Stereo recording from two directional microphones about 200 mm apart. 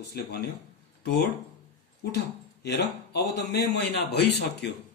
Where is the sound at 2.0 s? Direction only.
55° left (ahead or behind).